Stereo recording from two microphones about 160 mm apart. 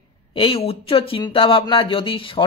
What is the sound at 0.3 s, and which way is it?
Speech, 35° left (ahead or behind).